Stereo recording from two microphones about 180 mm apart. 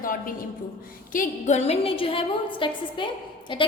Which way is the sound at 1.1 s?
45° left (ahead or behind).